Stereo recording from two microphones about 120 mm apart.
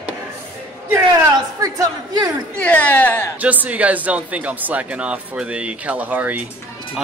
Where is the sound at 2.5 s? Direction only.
15° left (ahead or behind).